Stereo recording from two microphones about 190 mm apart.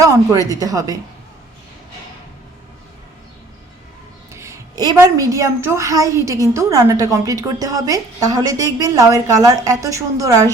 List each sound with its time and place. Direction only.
0.0 s a woman's voice: 20° right (ahead or behind)
4.4 s a woman's voice: 15° right (ahead or behind)